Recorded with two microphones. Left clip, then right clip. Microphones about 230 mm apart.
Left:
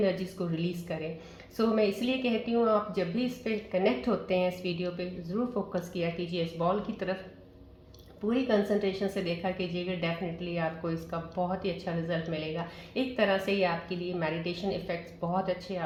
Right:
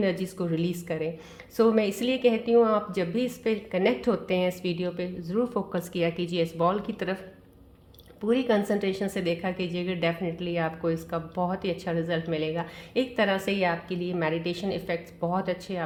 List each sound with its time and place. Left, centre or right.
0.0 s a woman's voice: right
8.3 s a woman's voice: right